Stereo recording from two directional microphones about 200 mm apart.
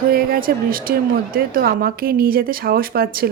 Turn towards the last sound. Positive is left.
turn(degrees=-45)  # may be behind; listen again after turning